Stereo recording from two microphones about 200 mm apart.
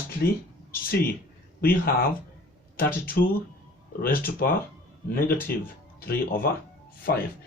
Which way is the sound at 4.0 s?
45° left (ahead or behind).